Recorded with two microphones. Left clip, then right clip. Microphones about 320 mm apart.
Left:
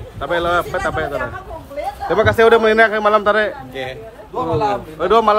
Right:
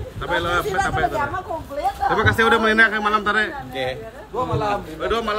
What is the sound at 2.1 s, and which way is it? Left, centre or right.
A man's voice, centre.